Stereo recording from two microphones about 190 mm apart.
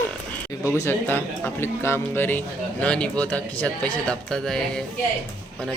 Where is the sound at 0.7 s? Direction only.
15° left (ahead or behind).